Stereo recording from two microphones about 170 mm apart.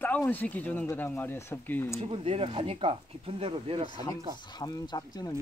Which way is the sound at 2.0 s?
35° right (ahead or behind).